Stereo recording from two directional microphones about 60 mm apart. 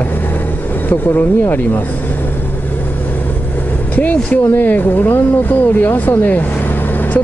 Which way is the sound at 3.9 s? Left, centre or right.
Left.